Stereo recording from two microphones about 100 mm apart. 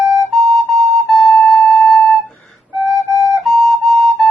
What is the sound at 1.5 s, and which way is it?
Music, centre (ahead or behind).